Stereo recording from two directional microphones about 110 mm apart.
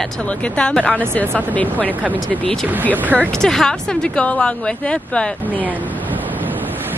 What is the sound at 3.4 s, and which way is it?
Speech, 5° left (ahead or behind).